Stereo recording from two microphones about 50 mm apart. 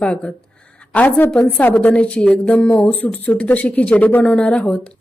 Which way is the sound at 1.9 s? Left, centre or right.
Left.